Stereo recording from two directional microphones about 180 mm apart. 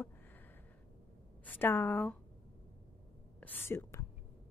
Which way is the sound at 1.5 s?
10° left (ahead or behind).